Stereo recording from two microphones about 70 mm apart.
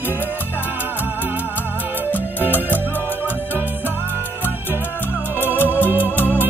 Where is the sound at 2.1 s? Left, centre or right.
Left.